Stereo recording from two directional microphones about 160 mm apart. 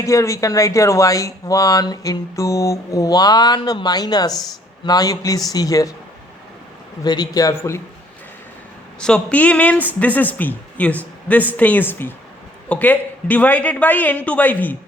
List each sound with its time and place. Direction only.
0.0 s speech: 20° left (ahead or behind)
7.0 s speech: 25° left (ahead or behind)
9.0 s speech: 5° left (ahead or behind)